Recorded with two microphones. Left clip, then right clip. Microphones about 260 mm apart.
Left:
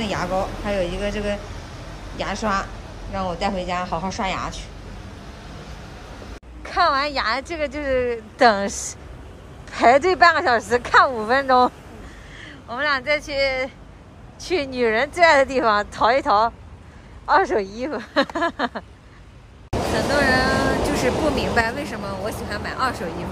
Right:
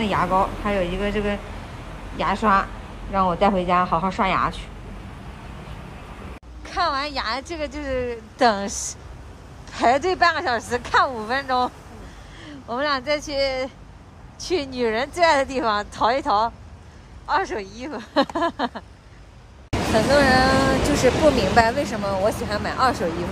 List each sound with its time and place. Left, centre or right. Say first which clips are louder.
0.0 s speech: right 4 dB; centre
6.6 s a woman's voice: left 4 dB; centre
20.2 s speech: right 1 dB; centre
20.5 s speech: right 1 dB; left
21.4 s speech: right 3 dB; centre